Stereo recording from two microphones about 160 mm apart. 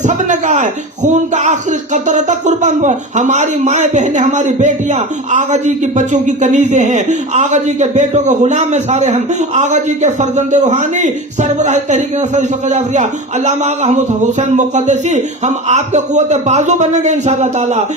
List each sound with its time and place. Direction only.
0.0 s speech: 50° right (ahead or behind)